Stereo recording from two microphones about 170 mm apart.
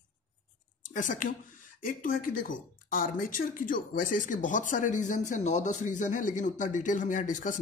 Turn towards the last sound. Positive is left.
turn(degrees=50)  # may be behind; listen again after turning